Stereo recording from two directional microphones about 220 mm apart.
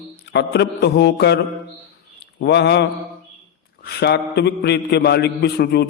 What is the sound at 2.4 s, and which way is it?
A man's voice, 50° left (ahead or behind).